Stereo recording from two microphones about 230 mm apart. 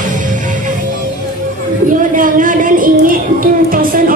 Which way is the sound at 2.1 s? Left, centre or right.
Right.